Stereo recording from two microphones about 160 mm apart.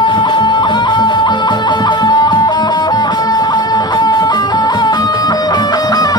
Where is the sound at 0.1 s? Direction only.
30° left (ahead or behind).